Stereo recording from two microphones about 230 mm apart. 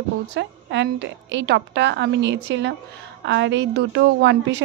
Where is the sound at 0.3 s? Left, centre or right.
Right.